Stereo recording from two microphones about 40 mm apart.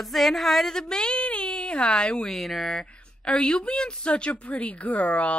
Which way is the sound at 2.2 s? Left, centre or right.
Centre.